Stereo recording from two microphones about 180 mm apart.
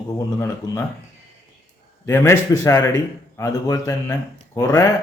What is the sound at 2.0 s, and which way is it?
Speech, 15° left (ahead or behind).